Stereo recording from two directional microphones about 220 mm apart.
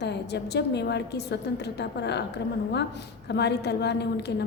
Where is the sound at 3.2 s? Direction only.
50° left (ahead or behind).